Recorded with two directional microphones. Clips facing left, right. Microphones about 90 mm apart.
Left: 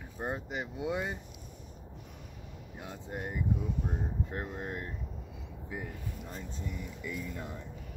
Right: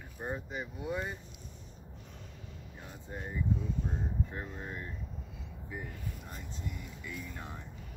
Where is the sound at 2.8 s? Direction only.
80° left.